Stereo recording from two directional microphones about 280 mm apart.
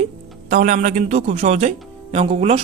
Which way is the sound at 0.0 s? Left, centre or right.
Right.